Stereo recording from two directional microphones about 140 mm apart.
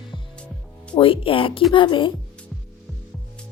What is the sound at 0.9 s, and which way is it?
A woman's voice, 40° left (ahead or behind).